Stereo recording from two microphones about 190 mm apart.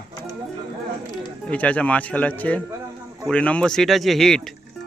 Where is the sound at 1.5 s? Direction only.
5° left (ahead or behind).